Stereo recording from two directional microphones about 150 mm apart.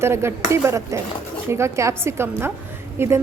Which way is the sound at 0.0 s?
15° right (ahead or behind).